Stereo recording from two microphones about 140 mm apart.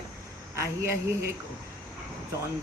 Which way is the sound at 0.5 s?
20° right (ahead or behind).